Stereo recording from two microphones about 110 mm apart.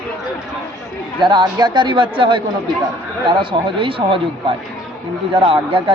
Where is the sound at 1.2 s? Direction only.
45° right (ahead or behind).